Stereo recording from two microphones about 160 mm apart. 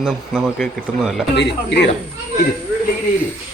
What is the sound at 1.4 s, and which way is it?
Speech, 90° left.